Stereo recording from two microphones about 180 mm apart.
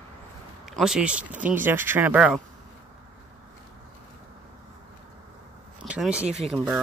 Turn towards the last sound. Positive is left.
turn(degrees=0)  # may be behind; listen again after turning